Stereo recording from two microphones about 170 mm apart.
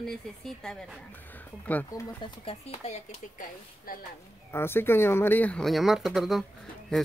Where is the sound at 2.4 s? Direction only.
35° left (ahead or behind).